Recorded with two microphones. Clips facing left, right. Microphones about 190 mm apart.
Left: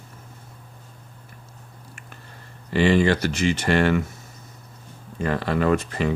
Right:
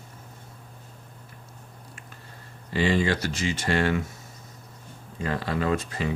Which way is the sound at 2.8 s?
65° left (ahead or behind).